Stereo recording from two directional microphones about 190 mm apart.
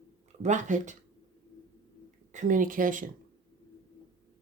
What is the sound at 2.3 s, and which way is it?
Speech, 40° right (ahead or behind).